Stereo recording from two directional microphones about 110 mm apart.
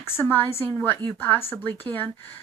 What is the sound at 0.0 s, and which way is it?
A woman's voice, 20° left (ahead or behind).